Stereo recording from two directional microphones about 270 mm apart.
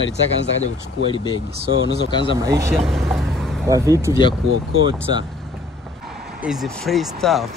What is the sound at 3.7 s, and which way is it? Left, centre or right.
Speech, centre.